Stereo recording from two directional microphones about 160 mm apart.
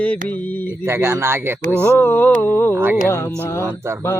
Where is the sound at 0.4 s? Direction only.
10° left (ahead or behind).